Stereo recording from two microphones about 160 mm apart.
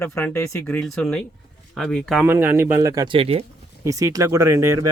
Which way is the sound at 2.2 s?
15° right (ahead or behind).